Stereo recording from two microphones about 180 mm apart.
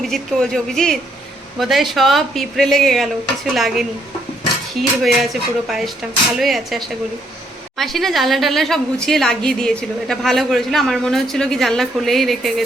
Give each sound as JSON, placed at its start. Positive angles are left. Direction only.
{"t": 0.0, "sound": "a woman's voice", "side_deg": 0}